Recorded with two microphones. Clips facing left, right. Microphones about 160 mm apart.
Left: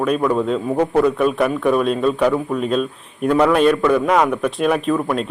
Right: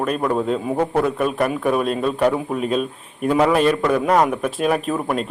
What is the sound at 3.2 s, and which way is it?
A man's voice, 5° right (ahead or behind).